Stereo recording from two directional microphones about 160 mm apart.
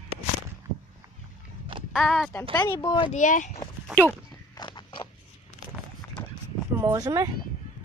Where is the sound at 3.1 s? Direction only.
50° left (ahead or behind).